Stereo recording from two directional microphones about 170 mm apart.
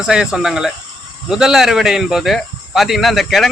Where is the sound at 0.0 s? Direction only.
5° right (ahead or behind).